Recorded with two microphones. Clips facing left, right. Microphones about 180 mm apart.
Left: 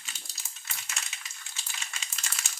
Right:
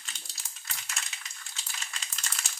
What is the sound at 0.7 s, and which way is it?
Crushing, 5° left (ahead or behind).